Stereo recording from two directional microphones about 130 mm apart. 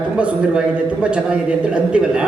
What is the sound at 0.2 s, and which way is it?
A man's voice, 10° right (ahead or behind).